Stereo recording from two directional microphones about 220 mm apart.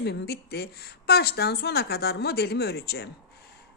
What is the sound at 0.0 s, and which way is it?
Speech, 50° left (ahead or behind).